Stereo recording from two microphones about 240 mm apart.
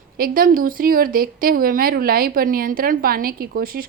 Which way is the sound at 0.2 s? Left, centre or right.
Right.